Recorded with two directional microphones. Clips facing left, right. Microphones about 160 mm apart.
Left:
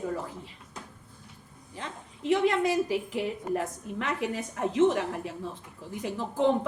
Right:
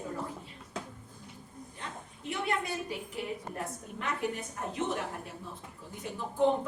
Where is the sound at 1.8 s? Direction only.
90° left.